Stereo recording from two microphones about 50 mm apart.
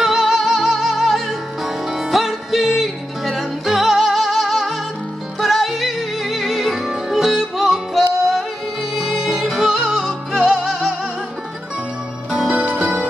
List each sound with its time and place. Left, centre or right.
0.0 s music: centre
12.3 s music: centre